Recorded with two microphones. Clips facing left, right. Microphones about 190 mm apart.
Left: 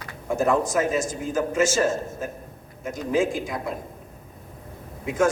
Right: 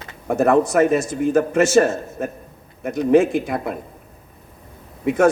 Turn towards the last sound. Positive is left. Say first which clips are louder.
# right 6 dB
turn(degrees=-65)  # may be behind; listen again after turning